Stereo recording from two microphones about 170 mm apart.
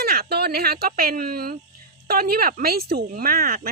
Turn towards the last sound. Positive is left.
turn(degrees=-60)  # may be behind; listen again after turning